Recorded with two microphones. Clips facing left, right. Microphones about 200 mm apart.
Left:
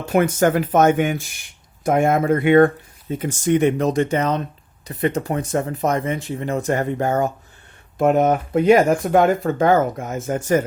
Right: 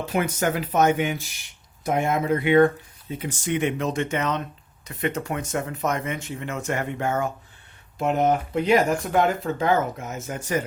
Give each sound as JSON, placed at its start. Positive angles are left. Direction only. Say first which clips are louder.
{"t": 0.0, "sound": "speech", "louder": "left 7 dB", "side_deg": 50}
{"t": 7.9, "sound": "speech", "louder": "left 5 dB", "side_deg": 50}